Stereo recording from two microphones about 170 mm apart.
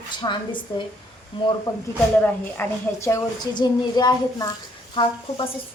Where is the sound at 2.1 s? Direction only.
10° left (ahead or behind).